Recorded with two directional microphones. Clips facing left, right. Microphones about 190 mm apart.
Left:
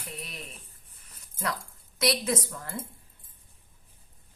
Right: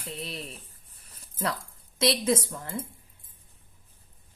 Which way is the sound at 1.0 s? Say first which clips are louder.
Right 2 dB; 30° right (ahead or behind).